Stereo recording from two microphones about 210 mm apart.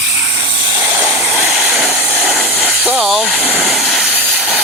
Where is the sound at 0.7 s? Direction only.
10° right (ahead or behind).